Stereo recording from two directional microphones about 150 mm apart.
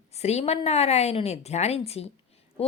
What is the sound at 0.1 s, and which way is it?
Speech, 45° left (ahead or behind).